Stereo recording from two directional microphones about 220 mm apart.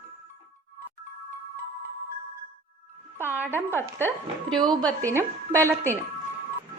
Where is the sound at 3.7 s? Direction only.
10° left (ahead or behind).